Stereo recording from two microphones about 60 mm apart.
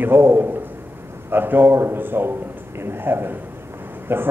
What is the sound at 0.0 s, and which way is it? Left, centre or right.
Speech, right.